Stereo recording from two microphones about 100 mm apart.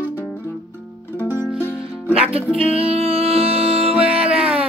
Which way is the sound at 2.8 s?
75° right (ahead or behind).